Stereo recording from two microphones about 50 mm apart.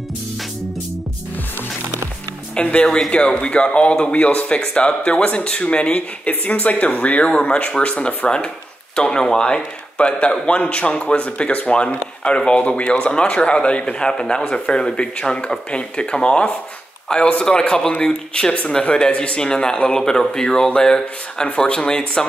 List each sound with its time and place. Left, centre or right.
2.5 s speech: left